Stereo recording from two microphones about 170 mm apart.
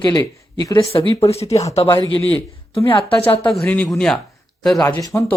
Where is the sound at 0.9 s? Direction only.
35° left (ahead or behind).